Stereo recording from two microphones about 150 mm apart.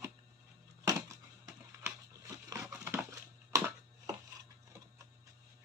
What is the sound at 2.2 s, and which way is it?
Crumpling, 20° right (ahead or behind).